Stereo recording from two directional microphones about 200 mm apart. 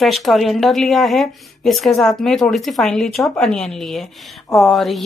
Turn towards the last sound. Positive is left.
turn(degrees=0)  # may be behind; listen again after turning